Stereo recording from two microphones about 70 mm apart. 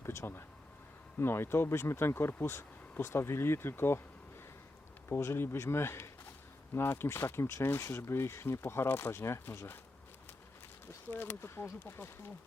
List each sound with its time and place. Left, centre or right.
0.0 s speech: left
5.0 s speech: left
11.1 s speech: left